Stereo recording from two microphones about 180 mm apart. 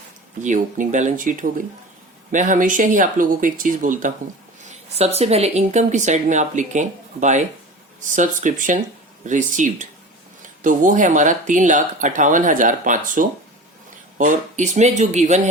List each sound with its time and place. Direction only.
0.4 s speech: 45° right (ahead or behind)